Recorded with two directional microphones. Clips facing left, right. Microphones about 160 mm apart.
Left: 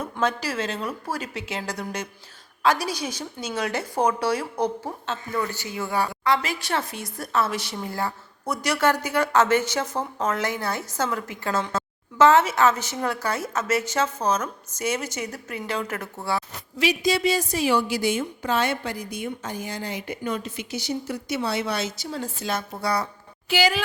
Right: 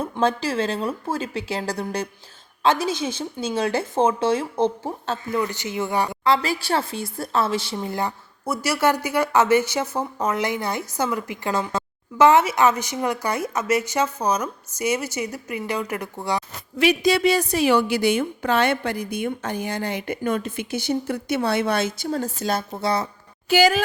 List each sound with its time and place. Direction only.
0.0 s a woman's voice: 30° right (ahead or behind)
8.4 s speech: 5° right (ahead or behind)
16.7 s a woman's voice: 60° right (ahead or behind); by 22.6 s 40° right (ahead or behind)
22.8 s a woman's voice: 25° right (ahead or behind)
23.5 s a woman's voice: 45° right (ahead or behind)